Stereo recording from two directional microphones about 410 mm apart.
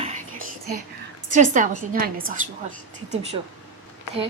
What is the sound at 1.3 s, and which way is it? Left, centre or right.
A woman's voice, centre.